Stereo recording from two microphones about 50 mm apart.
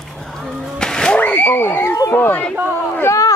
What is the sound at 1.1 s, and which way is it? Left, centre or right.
Speech, left.